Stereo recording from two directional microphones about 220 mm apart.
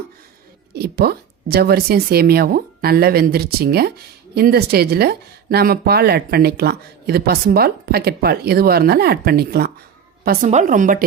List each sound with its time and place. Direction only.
0.7 s speech: 45° right (ahead or behind)
10.4 s speech: 35° right (ahead or behind)